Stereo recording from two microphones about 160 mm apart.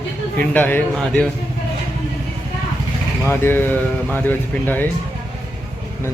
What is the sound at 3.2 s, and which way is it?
Speech, 15° left (ahead or behind).